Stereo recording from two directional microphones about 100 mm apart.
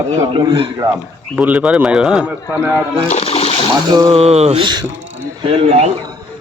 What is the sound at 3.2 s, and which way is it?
Splash, 90° left.